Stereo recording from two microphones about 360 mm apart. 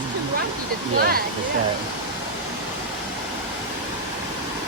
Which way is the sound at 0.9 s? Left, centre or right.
Right.